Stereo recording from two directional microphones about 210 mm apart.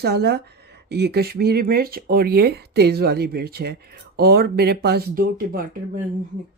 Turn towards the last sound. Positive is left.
turn(degrees=-40)  # may be behind; listen again after turning